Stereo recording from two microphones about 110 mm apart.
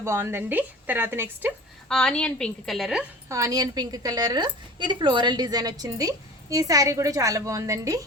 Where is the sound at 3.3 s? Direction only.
30° right (ahead or behind).